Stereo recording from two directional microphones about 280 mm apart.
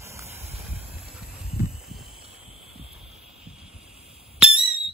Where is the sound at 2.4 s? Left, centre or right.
Left.